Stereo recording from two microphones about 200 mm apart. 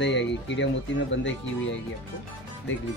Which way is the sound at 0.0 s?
60° left (ahead or behind).